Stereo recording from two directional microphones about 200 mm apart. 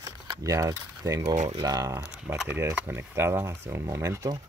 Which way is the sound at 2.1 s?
5° right (ahead or behind).